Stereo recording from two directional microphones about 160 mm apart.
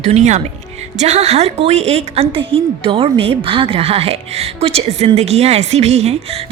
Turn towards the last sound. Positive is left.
turn(degrees=-40)  # may be behind; listen again after turning